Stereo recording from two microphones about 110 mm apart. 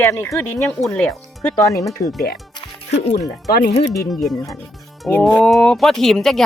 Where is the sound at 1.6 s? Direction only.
30° left (ahead or behind).